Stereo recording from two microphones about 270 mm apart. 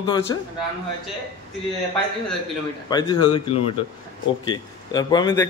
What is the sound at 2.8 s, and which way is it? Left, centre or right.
A man's voice, centre.